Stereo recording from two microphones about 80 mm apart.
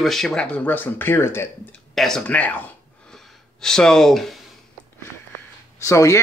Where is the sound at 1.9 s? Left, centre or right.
Centre.